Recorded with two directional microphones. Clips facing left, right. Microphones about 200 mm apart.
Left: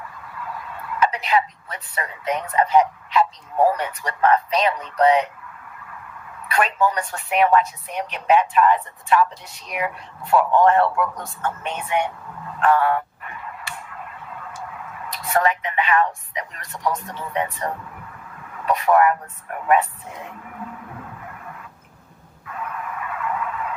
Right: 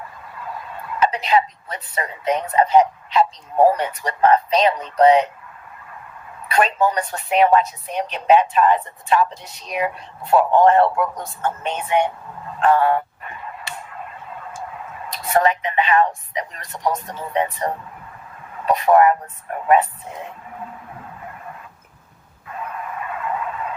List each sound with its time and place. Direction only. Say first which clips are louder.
0.0 s speech: right 1 dB; 25° right (ahead or behind)
6.4 s speech: right 2 dB; 25° right (ahead or behind)
12.5 s a sound: right 2 dB; 25° right (ahead or behind)
17.3 s speech: right 4 dB; 25° right (ahead or behind)
22.4 s vehicle: right 1 dB; 25° right (ahead or behind)